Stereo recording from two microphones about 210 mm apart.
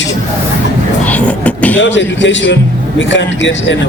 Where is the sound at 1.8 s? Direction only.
60° left (ahead or behind).